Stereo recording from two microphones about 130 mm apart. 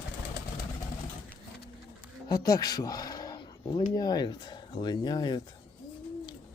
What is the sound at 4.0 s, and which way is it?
Speech, 30° left (ahead or behind).